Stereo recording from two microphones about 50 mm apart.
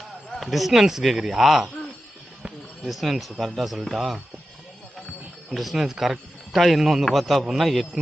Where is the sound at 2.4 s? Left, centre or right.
Centre.